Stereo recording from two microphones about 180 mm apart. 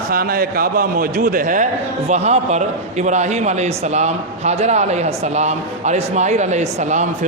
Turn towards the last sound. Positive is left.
turn(degrees=-40)  # may be behind; listen again after turning